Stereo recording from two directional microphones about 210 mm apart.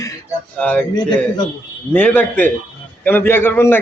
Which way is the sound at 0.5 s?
5° left (ahead or behind).